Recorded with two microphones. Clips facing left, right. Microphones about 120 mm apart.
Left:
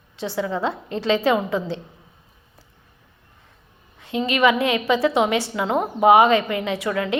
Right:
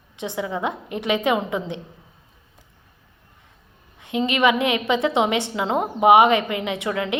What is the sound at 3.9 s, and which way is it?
A woman's voice, 20° right (ahead or behind).